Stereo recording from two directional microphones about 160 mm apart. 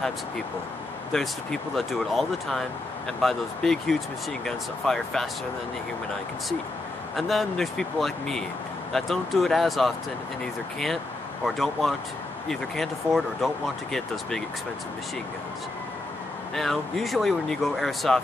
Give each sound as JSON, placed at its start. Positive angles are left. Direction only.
{"t": 1.1, "sound": "speech", "side_deg": 0}
{"t": 7.2, "sound": "speech", "side_deg": 0}
{"t": 16.5, "sound": "speech", "side_deg": 0}